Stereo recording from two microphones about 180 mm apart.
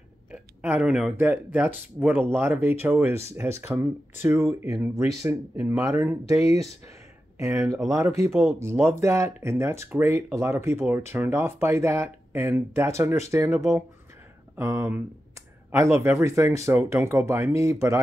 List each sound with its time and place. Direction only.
0.3 s speech: 10° right (ahead or behind)
7.3 s speech: 15° right (ahead or behind)